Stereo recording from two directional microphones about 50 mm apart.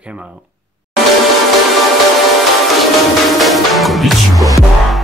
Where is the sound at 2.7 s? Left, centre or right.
Centre.